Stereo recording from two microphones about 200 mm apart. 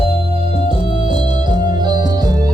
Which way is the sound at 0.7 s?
25° right (ahead or behind).